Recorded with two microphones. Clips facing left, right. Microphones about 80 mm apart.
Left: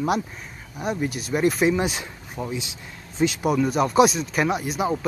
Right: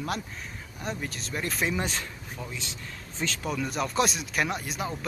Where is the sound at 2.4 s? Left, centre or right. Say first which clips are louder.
Left 10 dB; left.